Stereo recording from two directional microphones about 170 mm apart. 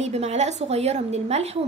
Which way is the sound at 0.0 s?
40° right (ahead or behind).